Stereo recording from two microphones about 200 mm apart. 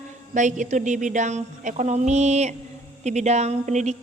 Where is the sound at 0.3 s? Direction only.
40° right (ahead or behind).